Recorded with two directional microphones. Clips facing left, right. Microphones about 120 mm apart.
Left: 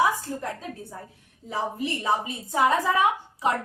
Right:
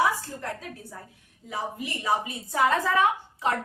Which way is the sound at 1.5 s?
25° left (ahead or behind).